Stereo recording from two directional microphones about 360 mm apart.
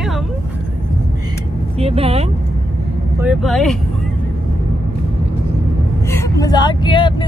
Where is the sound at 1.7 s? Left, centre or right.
Centre.